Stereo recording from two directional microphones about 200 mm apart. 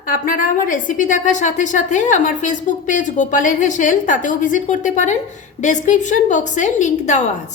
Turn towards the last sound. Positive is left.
turn(degrees=35)  # may be behind; listen again after turning